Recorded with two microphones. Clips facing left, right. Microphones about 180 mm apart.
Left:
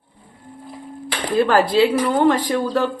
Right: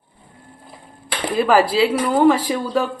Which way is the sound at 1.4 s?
5° right (ahead or behind).